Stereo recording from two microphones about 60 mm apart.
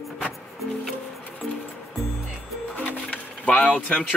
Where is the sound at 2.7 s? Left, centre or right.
Left.